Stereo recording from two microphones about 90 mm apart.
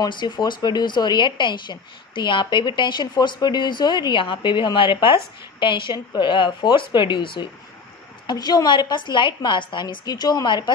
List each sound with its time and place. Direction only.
0.0 s speech: 55° left (ahead or behind)
8.3 s speech: 50° left (ahead or behind)